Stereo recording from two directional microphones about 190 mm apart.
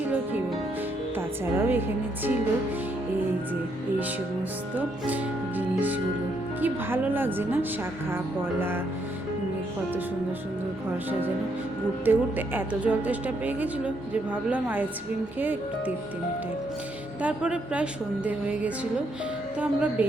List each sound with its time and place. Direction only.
1.1 s speech: 10° right (ahead or behind)
4.8 s a woman's voice: 10° right (ahead or behind)
12.0 s a woman's voice: 10° right (ahead or behind)
17.2 s a woman's voice: 5° right (ahead or behind)